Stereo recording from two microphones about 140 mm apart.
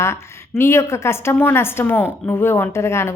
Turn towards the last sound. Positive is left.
turn(degrees=20)  # may be behind; listen again after turning